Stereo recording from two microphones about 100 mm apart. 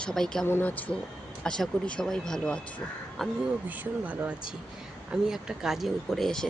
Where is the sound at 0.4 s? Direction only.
20° left (ahead or behind).